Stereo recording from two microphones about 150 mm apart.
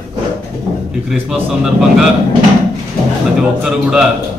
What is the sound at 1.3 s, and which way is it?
Speech, 5° right (ahead or behind).